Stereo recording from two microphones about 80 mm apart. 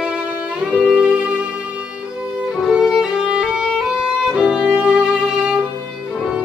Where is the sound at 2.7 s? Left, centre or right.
Centre.